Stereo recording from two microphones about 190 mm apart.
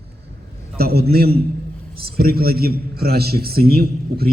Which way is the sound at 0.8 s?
55° right (ahead or behind).